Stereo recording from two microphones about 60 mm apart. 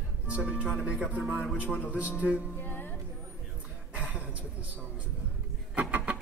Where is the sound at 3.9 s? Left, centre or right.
Right.